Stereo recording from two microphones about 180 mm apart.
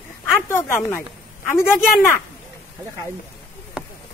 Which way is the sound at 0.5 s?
15° left (ahead or behind).